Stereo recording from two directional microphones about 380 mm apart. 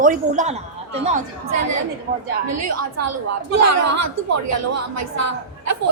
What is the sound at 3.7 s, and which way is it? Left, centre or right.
A woman's voice, right.